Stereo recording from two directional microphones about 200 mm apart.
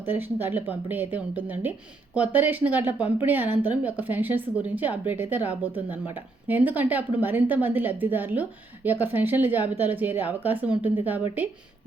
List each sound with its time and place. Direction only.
0.0 s a woman's voice: 10° right (ahead or behind)